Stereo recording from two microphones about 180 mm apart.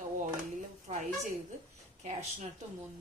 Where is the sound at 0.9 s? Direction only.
35° right (ahead or behind).